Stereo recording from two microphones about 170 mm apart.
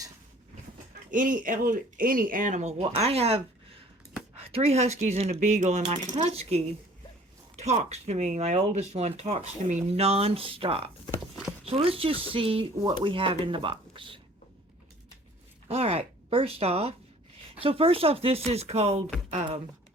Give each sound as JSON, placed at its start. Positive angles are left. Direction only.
{"t": 1.1, "sound": "speech", "side_deg": -50}
{"t": 15.7, "sound": "speech", "side_deg": -35}